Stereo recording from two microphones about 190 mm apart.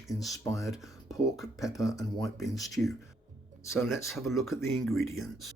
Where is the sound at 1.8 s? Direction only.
20° left (ahead or behind).